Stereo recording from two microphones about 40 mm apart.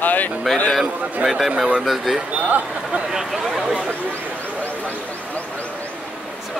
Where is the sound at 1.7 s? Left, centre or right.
Centre.